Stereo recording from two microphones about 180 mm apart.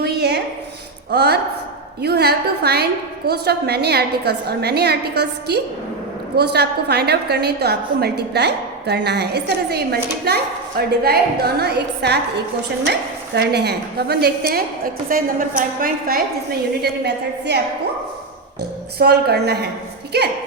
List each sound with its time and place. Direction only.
0.0 s a sound: 65° right (ahead or behind)
1.1 s a woman's voice: 65° right (ahead or behind)
16.8 s a woman's voice: 70° right (ahead or behind)
18.9 s a woman's voice: 60° right (ahead or behind)